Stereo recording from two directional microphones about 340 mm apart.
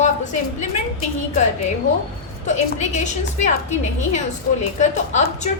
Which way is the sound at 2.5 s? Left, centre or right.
Left.